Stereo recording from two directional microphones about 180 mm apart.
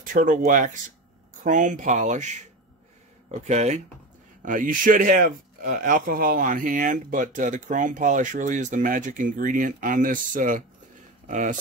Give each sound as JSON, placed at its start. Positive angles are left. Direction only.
{"t": 0.0, "sound": "speech", "side_deg": -45}